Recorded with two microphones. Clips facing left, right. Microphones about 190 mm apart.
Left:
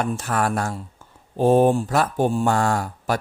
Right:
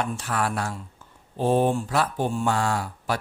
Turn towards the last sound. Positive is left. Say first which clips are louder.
# left 4 dB
turn(degrees=45)  # may be behind; listen again after turning